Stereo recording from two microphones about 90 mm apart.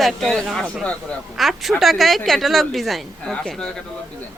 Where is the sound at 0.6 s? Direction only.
15° left (ahead or behind).